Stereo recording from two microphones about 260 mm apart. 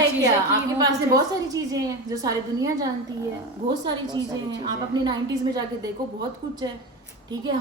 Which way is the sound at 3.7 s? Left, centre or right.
Centre.